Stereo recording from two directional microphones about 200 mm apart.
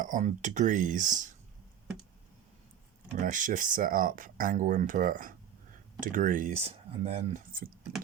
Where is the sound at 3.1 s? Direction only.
40° right (ahead or behind).